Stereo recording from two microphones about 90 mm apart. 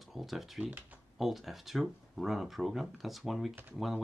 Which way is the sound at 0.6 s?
15° right (ahead or behind).